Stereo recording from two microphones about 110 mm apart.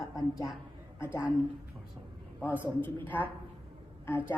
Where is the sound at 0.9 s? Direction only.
25° left (ahead or behind).